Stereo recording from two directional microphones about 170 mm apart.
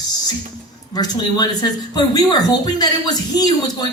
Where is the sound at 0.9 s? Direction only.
25° left (ahead or behind).